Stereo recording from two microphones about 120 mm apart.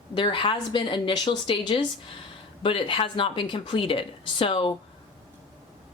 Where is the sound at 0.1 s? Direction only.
40° left (ahead or behind).